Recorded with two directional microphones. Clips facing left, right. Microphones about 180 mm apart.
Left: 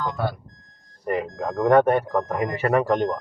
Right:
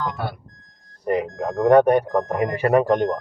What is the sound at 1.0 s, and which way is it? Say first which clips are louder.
Speech: right 3 dB; 20° right (ahead or behind).